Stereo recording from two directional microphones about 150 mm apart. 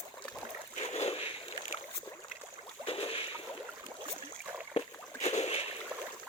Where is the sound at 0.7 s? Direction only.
50° left (ahead or behind).